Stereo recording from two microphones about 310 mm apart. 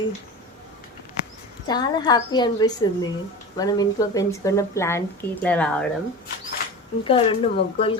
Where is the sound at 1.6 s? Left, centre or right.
Centre.